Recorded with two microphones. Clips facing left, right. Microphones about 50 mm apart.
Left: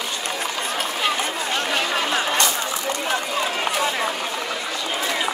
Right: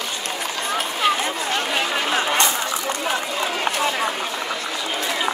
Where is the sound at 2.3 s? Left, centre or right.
Right.